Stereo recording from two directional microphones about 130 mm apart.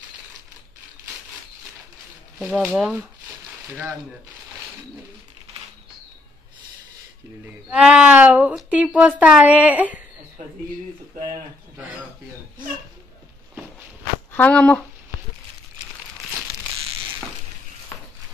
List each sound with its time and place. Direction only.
2.7 s speech: 10° right (ahead or behind)
7.7 s speech: 10° right (ahead or behind)
14.3 s speech: 10° left (ahead or behind)
17.9 s a sound: 15° left (ahead or behind)